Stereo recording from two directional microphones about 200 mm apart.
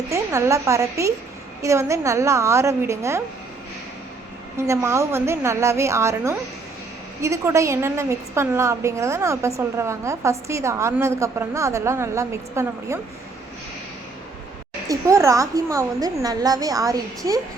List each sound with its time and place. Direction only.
0.1 s a woman's voice: 15° right (ahead or behind)
4.5 s a woman's voice: 15° right (ahead or behind)
14.8 s a woman's voice: 15° right (ahead or behind)